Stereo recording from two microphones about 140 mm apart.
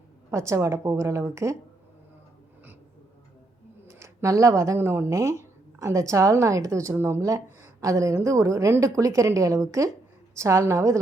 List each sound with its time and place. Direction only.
0.3 s speech: 20° right (ahead or behind)
3.8 s speech: 20° right (ahead or behind)